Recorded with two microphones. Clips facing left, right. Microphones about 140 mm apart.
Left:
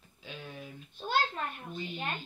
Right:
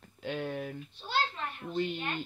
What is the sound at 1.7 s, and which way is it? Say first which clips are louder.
Speech: right 8 dB; 60° right (ahead or behind).